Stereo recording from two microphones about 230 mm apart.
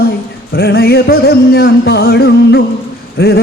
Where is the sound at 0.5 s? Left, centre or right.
Left.